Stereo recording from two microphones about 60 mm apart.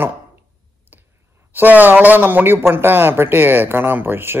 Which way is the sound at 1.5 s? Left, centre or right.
Right.